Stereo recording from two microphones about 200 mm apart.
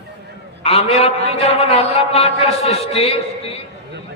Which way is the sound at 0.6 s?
30° left (ahead or behind).